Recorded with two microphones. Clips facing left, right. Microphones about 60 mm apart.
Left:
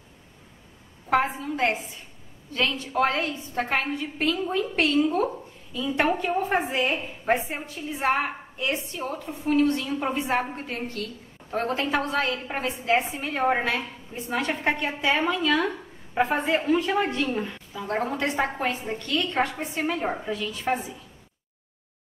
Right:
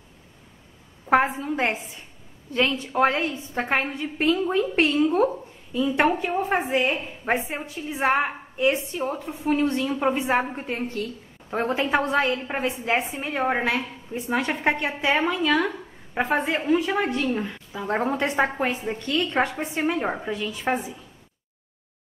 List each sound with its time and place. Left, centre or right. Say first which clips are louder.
1.1 s a woman's voice: right 3 dB; right; by 13.7 s centre
13.7 s a woman's voice: right 2 dB; centre
17.7 s a woman's voice: right 3 dB; right